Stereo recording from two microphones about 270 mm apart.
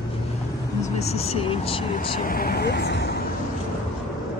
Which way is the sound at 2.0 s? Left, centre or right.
Left.